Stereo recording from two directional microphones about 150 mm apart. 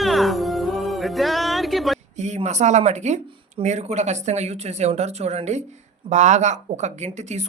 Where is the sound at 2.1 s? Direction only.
50° right (ahead or behind).